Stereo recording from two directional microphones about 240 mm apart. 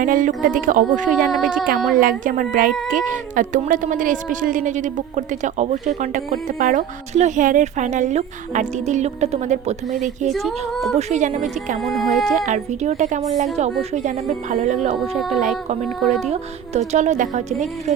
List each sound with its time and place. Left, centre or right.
0.0 s speech: right
1.3 s child singing: centre
2.0 s speech: right
10.3 s child singing: centre
10.9 s speech: right
11.8 s child singing: centre
12.5 s speech: right
16.0 s child singing: centre
16.3 s speech: right